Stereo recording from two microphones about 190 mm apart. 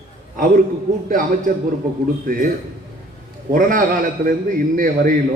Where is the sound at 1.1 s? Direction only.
45° right (ahead or behind).